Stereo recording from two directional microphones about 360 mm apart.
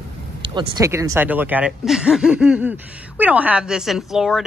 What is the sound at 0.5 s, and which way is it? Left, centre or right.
Speech, centre.